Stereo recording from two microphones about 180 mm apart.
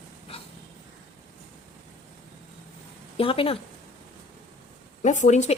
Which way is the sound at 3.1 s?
30° left (ahead or behind).